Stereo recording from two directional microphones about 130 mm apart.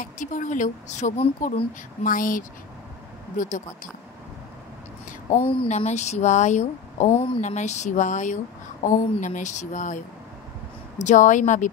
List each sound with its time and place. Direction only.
0.0 s speech: 80° left
2.0 s speech: 90° left
3.3 s speech: 75° left (ahead or behind)
5.4 s speech: 45° left (ahead or behind)
5.9 s speech: 60° left (ahead or behind)